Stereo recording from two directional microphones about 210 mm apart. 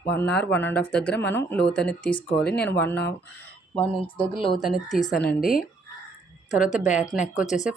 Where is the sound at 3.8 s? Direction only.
25° left (ahead or behind).